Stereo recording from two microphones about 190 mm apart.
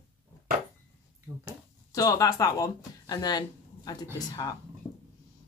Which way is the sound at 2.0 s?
20° left (ahead or behind).